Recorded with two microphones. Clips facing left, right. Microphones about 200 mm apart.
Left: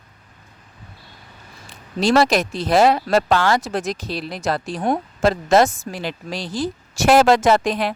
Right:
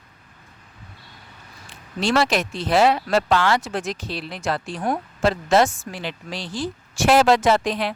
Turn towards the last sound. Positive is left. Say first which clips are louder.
# left 2 dB
turn(degrees=45)  # may be behind; listen again after turning